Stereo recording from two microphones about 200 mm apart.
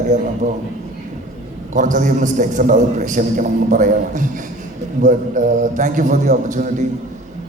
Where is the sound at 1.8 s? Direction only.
40° right (ahead or behind).